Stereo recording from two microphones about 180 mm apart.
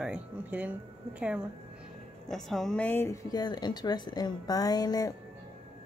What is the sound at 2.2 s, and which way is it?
A woman's voice, centre (ahead or behind).